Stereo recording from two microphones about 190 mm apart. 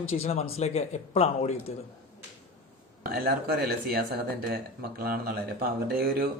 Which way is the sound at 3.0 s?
55° right (ahead or behind).